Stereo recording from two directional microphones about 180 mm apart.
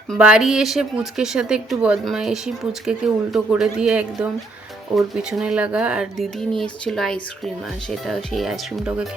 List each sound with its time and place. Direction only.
0.1 s speech: 5° right (ahead or behind)